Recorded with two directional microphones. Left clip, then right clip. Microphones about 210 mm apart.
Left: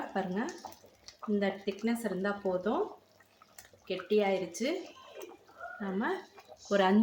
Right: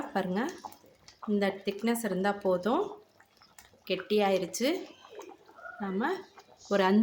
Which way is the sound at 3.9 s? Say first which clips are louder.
Right 2 dB; 40° right (ahead or behind).